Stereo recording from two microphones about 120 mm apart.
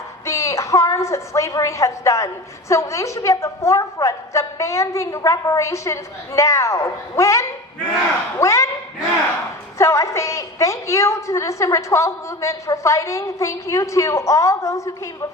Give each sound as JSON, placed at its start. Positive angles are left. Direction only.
{"t": 0.3, "sound": "a woman's voice", "side_deg": 25}
{"t": 9.7, "sound": "a woman's voice", "side_deg": 25}